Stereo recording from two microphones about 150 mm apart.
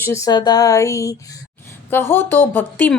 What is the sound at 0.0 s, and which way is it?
A woman's voice, 20° left (ahead or behind).